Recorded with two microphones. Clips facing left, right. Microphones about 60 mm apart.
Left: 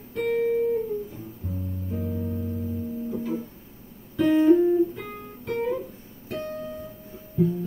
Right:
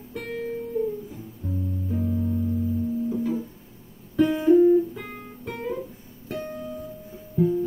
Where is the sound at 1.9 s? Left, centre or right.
Centre.